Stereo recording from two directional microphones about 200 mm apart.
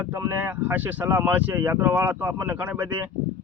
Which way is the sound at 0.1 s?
10° right (ahead or behind).